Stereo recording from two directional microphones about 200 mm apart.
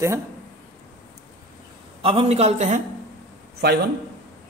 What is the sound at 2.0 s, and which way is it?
Speech, 30° right (ahead or behind).